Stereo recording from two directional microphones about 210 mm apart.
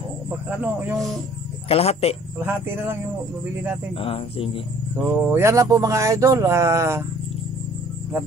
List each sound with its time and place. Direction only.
0.5 s speech: 10° right (ahead or behind)
1.7 s speech: 30° left (ahead or behind)
2.3 s speech: 10° right (ahead or behind)
4.0 s speech: 25° left (ahead or behind)
4.9 s speech: 10° right (ahead or behind)